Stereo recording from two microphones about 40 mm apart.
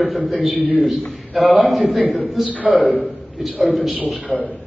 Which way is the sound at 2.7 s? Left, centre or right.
Right.